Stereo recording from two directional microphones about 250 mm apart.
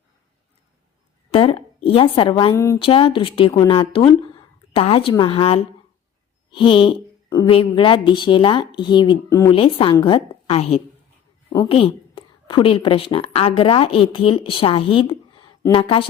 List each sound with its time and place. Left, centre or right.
1.3 s a woman's voice: left